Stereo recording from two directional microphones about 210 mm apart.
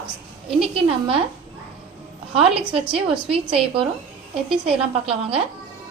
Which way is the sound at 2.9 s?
25° right (ahead or behind).